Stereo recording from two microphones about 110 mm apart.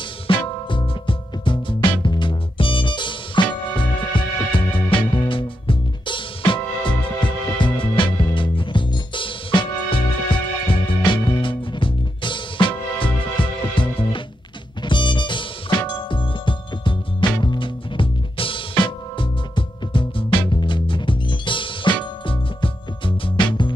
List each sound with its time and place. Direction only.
0.3 s music: 50° left (ahead or behind)